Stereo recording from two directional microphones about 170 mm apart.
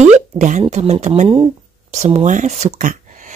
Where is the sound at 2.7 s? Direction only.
50° right (ahead or behind).